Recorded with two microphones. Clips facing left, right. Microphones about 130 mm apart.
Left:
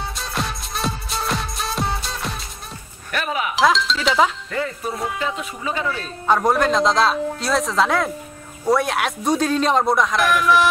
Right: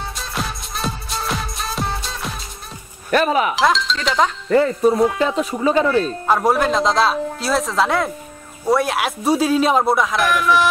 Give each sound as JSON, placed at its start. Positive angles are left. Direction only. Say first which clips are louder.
{"t": 0.2, "sound": "music", "louder": "even", "side_deg": 0}
{"t": 3.1, "sound": "speech", "louder": "right 8 dB", "side_deg": -40}
{"t": 3.5, "sound": "speech", "louder": "even", "side_deg": 0}
{"t": 5.2, "sound": "speech", "louder": "right 8 dB", "side_deg": -35}
{"t": 6.2, "sound": "speech", "louder": "left 3 dB", "side_deg": -5}